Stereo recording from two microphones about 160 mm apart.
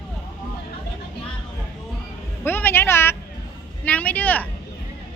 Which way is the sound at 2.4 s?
15° left (ahead or behind).